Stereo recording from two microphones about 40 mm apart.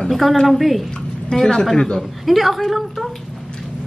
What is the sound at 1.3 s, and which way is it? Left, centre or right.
Speech, centre.